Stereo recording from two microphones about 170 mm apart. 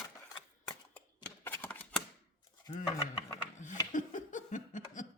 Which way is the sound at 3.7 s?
50° left (ahead or behind).